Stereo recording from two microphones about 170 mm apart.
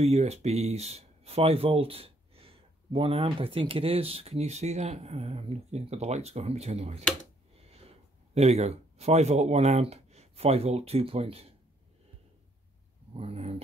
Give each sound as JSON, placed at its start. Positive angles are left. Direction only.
{"t": 0.0, "sound": "speech", "side_deg": -40}
{"t": 8.4, "sound": "speech", "side_deg": -40}
{"t": 13.1, "sound": "speech", "side_deg": -35}